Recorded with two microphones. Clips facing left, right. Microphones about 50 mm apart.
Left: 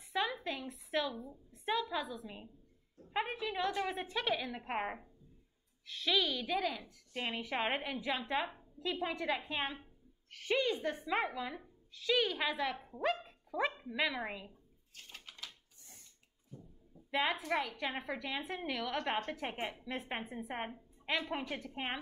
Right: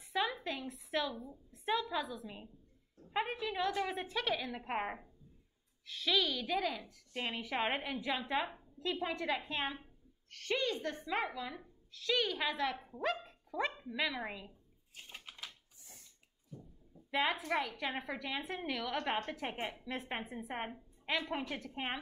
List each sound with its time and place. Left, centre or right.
0.1 s a woman's voice: centre
15.0 s a sound: centre
17.1 s a woman's voice: centre